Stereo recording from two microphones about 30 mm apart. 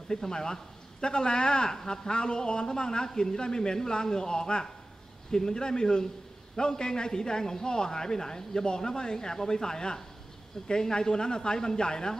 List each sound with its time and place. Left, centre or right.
0.1 s a man's voice: left